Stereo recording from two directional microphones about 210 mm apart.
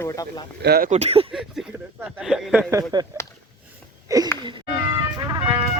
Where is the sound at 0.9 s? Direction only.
30° right (ahead or behind).